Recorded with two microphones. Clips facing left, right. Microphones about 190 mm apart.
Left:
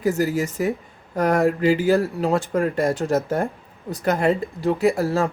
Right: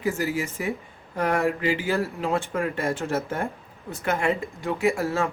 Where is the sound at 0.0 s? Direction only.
40° left (ahead or behind).